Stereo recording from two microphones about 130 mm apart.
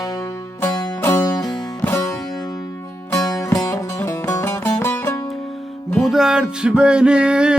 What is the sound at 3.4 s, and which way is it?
Music, 25° left (ahead or behind).